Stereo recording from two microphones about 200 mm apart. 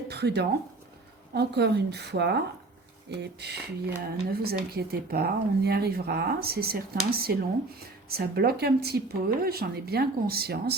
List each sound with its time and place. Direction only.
0.1 s a woman's voice: 55° right (ahead or behind)